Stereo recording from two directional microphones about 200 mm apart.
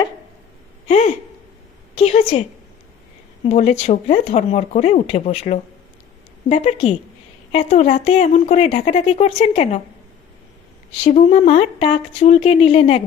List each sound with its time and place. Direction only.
0.9 s speech: 35° left (ahead or behind)
3.5 s speech: 35° left (ahead or behind)
11.0 s speech: 30° left (ahead or behind)